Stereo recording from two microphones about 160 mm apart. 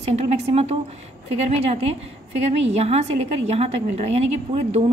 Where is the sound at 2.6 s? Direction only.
40° right (ahead or behind).